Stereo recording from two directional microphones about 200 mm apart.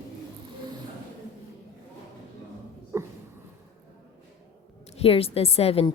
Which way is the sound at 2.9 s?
15° right (ahead or behind).